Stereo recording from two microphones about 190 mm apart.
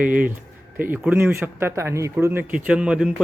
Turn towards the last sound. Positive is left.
turn(degrees=-5)  # may be behind; listen again after turning